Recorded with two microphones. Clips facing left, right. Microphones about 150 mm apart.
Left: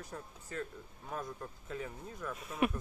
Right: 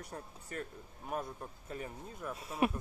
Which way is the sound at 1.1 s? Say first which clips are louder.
Right 2 dB; 20° right (ahead or behind).